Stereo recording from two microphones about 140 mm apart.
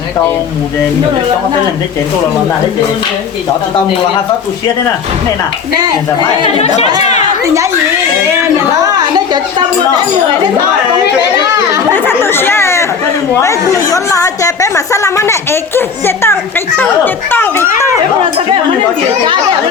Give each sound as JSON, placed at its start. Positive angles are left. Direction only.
{"t": 6.4, "sound": "speech", "side_deg": 50}
{"t": 11.5, "sound": "chatter", "side_deg": -20}
{"t": 11.9, "sound": "a woman's voice", "side_deg": 15}